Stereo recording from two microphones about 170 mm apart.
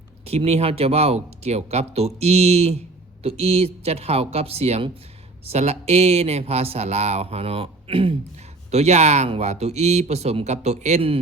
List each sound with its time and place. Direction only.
0.3 s speech: 35° right (ahead or behind)